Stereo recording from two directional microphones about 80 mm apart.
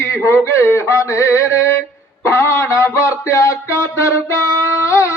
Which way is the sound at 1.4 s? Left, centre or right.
Left.